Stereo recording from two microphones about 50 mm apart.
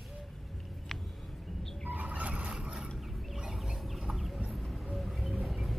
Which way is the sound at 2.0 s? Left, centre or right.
Right.